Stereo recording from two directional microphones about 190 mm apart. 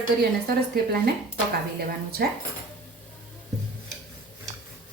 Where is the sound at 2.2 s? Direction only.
55° right (ahead or behind).